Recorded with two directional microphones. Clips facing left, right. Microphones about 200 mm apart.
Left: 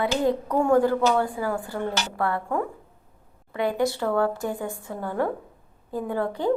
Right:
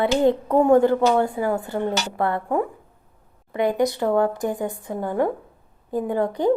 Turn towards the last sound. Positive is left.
turn(degrees=-20)  # may be behind; listen again after turning